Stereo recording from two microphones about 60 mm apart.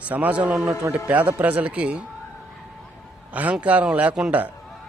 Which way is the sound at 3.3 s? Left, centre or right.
Right.